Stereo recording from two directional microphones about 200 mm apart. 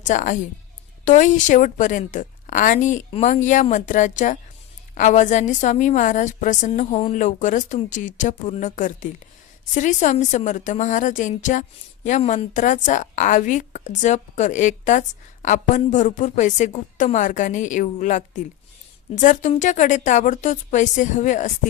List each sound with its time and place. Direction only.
0.0 s a woman's voice: 40° left (ahead or behind)